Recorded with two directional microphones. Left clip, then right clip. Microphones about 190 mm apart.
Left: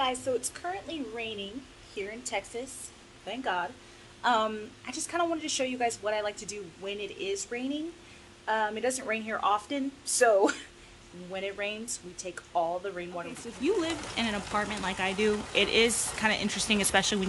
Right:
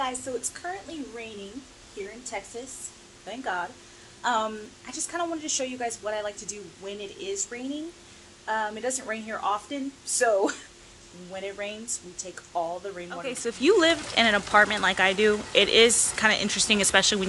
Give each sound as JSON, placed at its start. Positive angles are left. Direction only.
{"t": 0.0, "sound": "a woman's voice", "side_deg": 15}
{"t": 2.0, "sound": "speech", "side_deg": 35}
{"t": 3.3, "sound": "a woman's voice", "side_deg": 10}
{"t": 13.4, "sound": "speech", "side_deg": 0}